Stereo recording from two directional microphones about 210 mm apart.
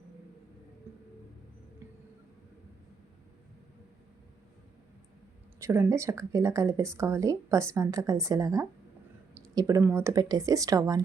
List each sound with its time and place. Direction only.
5.5 s speech: 15° right (ahead or behind)